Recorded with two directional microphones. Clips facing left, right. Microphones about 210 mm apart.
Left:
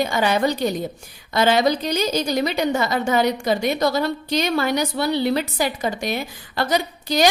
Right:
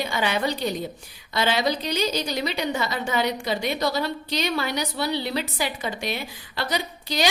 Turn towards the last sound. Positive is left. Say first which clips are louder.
# left 6 dB
turn(degrees=45)  # may be behind; listen again after turning